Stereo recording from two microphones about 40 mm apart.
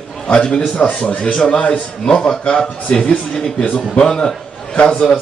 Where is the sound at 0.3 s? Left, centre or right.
Left.